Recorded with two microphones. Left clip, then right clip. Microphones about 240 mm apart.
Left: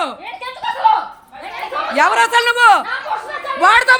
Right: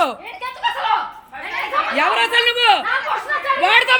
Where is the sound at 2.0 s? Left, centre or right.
Centre.